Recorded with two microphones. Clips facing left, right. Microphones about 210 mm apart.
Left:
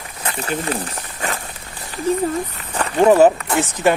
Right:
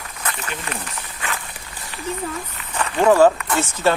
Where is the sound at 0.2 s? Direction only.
30° left (ahead or behind).